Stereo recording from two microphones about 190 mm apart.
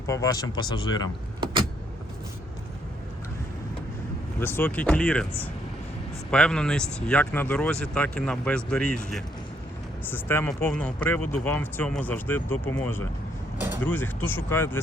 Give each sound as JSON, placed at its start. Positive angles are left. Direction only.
{"t": 0.1, "sound": "speech", "side_deg": 20}
{"t": 4.4, "sound": "speech", "side_deg": 10}